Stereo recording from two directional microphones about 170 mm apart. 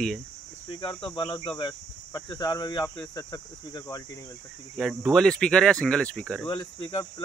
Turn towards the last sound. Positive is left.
turn(degrees=25)  # may be behind; listen again after turning